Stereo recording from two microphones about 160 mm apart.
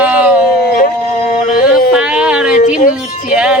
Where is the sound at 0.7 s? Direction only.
70° left (ahead or behind).